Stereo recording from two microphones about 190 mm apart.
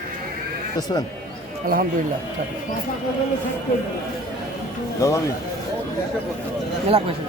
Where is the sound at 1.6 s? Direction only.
50° right (ahead or behind).